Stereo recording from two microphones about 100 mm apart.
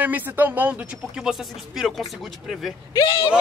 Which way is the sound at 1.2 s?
5° right (ahead or behind).